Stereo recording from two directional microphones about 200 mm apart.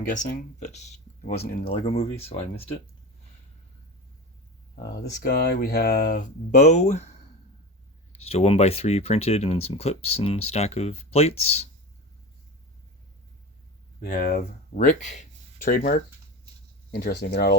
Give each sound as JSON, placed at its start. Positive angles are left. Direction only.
{"t": 0.1, "sound": "speech", "side_deg": 40}
{"t": 5.2, "sound": "speech", "side_deg": 50}
{"t": 14.0, "sound": "speech", "side_deg": 40}
{"t": 16.9, "sound": "speech", "side_deg": 55}